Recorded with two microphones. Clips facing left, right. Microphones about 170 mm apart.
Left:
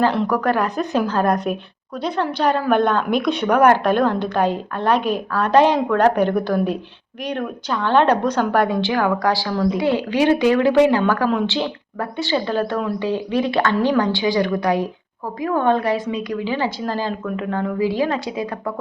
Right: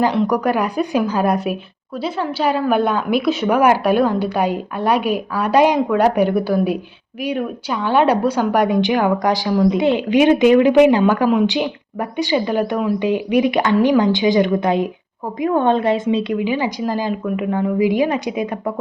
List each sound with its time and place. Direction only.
0.3 s a woman's voice: 10° right (ahead or behind)